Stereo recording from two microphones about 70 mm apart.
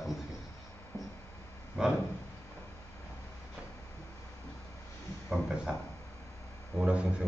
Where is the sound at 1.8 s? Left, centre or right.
Centre.